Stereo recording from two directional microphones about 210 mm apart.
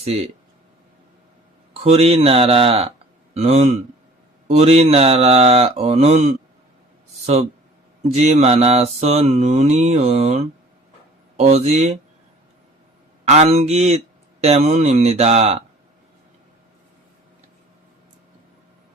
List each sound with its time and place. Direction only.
0.0 s speech: 30° right (ahead or behind)
1.8 s speech: 30° right (ahead or behind)
3.3 s mantra: 30° right (ahead or behind)
4.4 s speech: 30° right (ahead or behind)
8.1 s mantra: 30° right (ahead or behind)
13.2 s mantra: 30° right (ahead or behind)